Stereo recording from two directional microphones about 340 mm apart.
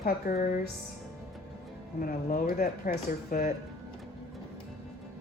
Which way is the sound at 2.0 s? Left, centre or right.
Left.